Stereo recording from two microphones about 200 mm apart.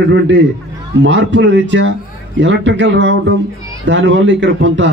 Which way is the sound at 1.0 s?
65° right (ahead or behind).